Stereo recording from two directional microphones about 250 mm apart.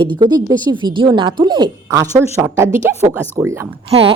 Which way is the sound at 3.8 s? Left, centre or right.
Right.